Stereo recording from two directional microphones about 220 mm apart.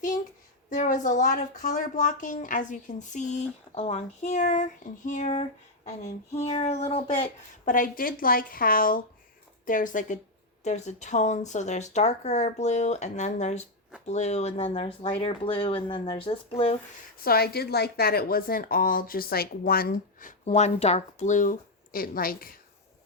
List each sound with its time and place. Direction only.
0.7 s speech: 35° left (ahead or behind)
7.7 s speech: 40° left (ahead or behind)
17.2 s speech: 45° left (ahead or behind)